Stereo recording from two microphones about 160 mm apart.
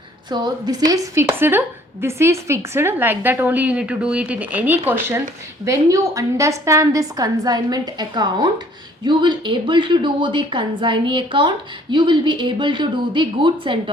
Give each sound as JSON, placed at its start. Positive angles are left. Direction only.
{"t": 0.3, "sound": "a woman's voice", "side_deg": -25}